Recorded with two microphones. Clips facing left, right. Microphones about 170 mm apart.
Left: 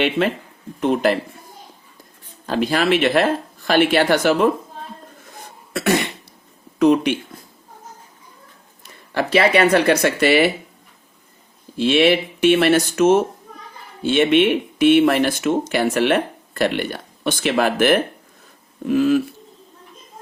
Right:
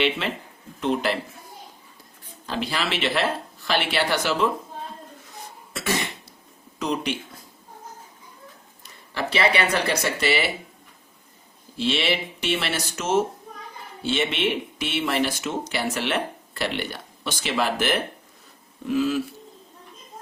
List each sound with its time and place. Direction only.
0.2 s speech: 45° left (ahead or behind)
2.5 s speech: 50° left (ahead or behind)
6.7 s speech: 60° left (ahead or behind)
9.1 s speech: 50° left (ahead or behind)
11.8 s speech: 55° left (ahead or behind)